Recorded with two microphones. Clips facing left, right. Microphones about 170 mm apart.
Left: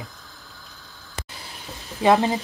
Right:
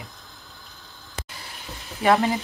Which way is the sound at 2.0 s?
20° left (ahead or behind).